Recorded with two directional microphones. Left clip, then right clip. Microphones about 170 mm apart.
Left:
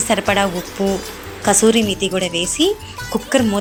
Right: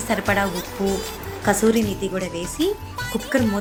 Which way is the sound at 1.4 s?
15° left (ahead or behind).